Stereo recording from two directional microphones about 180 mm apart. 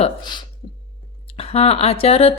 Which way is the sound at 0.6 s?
30° left (ahead or behind).